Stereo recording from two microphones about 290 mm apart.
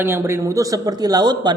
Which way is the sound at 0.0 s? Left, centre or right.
Centre.